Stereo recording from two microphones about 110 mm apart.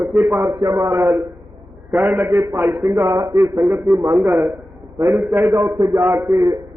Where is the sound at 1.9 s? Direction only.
15° right (ahead or behind).